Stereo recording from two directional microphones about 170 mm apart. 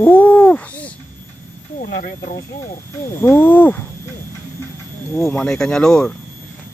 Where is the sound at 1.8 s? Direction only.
60° left (ahead or behind).